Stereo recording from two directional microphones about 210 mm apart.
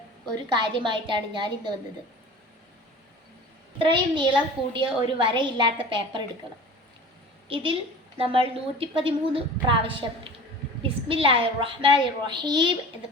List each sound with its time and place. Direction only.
0.5 s a woman's voice: 20° right (ahead or behind)
3.8 s a woman's voice: 25° right (ahead or behind)
7.4 s a woman's voice: 25° right (ahead or behind)